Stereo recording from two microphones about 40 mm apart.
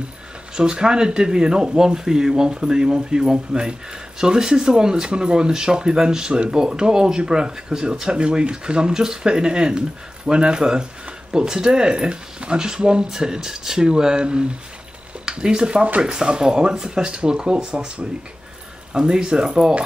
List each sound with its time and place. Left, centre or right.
0.6 s speech: centre
15.2 s speech: centre